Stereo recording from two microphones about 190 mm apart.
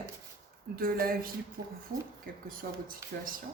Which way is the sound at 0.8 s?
50° right (ahead or behind).